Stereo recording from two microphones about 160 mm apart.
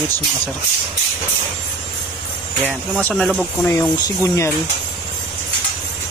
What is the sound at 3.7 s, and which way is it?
Speech, 20° left (ahead or behind).